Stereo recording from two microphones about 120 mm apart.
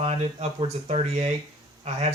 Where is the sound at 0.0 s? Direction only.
60° right (ahead or behind).